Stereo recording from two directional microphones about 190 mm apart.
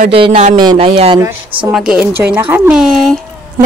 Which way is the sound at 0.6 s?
25° right (ahead or behind).